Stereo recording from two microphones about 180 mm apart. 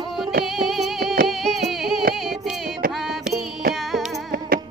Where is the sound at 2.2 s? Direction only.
Centre (ahead or behind).